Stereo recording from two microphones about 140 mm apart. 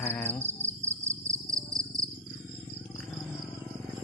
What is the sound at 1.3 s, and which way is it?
Cricket, 25° right (ahead or behind).